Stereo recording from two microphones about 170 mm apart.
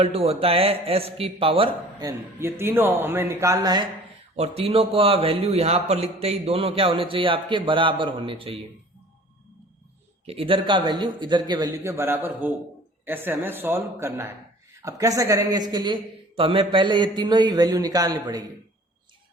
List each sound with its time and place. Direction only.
0.0 s a man's voice: 35° right (ahead or behind)
2.0 s speech: 15° right (ahead or behind)
4.4 s a man's voice: 35° right (ahead or behind)
10.2 s a man's voice: 35° right (ahead or behind)